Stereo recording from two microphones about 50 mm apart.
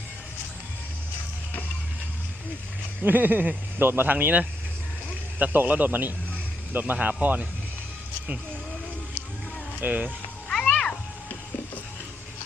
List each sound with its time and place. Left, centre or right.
3.0 s speech: right
9.8 s speech: right
10.5 s music: centre